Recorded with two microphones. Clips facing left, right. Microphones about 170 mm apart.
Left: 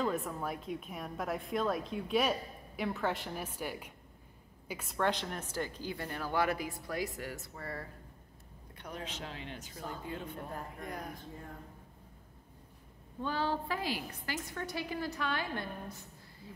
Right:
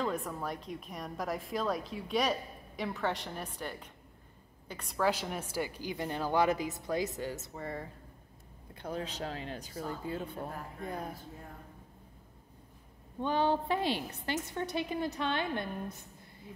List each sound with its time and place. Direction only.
0.0 s a woman's voice: centre (ahead or behind); by 7.9 s 20° right (ahead or behind)
8.7 s speech: 30° right (ahead or behind)
13.2 s a woman's voice: 20° right (ahead or behind)